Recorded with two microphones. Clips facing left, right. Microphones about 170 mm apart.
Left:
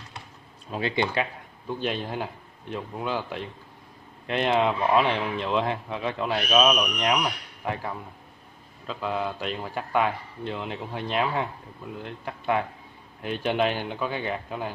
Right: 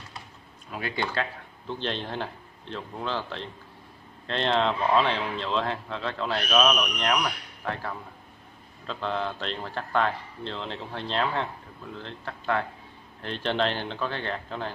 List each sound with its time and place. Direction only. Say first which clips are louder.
0.7 s a man's voice: left 5 dB; 25° left (ahead or behind)